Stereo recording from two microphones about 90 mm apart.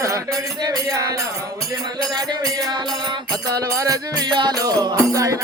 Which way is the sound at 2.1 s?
45° right (ahead or behind).